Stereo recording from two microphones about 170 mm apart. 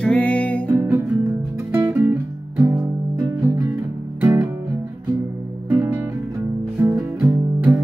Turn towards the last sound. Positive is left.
turn(degrees=-5)  # may be behind; listen again after turning